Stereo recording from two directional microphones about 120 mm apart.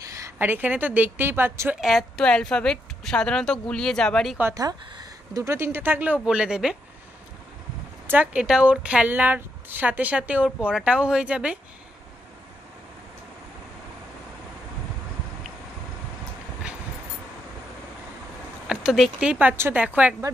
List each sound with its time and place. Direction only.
0.0 s a woman's voice: 25° right (ahead or behind)
1.8 s a woman's voice: centre (ahead or behind)
4.6 s speech: 30° right (ahead or behind); by 6.8 s 5° right (ahead or behind)
8.1 s speech: 10° right (ahead or behind)
18.7 s speech: 5° right (ahead or behind)